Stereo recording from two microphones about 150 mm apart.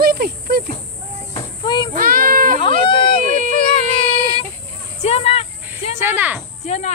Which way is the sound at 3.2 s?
60° right (ahead or behind).